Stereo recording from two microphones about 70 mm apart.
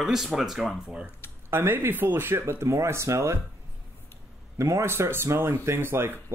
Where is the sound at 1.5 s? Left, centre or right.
Right.